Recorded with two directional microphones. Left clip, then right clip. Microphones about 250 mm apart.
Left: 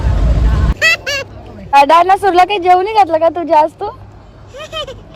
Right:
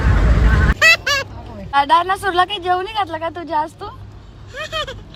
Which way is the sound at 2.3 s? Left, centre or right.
Right.